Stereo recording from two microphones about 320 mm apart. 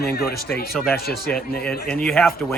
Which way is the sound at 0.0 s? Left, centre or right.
Left.